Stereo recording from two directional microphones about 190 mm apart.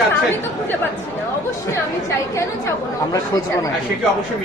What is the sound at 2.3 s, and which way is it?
Speech, 15° left (ahead or behind).